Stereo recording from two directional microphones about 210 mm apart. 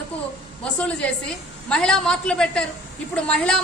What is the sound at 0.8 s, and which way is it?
A woman's voice, 5° left (ahead or behind).